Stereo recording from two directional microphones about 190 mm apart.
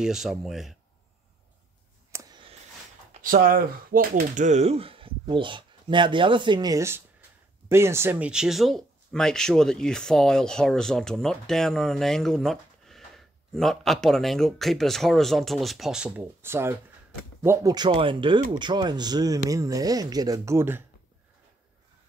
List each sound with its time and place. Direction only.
0.0 s speech: centre (ahead or behind)
2.1 s a sound: 25° right (ahead or behind)
3.1 s speech: 45° right (ahead or behind); by 20.8 s 10° right (ahead or behind)